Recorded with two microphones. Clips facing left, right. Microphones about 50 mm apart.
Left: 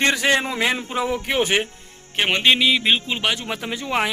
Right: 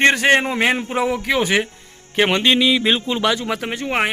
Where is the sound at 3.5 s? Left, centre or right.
Right.